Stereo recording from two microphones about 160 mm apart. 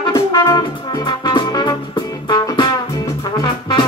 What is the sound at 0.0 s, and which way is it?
Music, 20° left (ahead or behind).